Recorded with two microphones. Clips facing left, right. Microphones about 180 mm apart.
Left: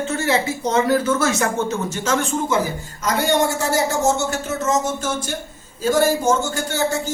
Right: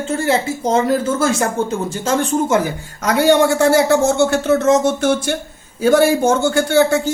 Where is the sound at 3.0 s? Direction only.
60° right (ahead or behind).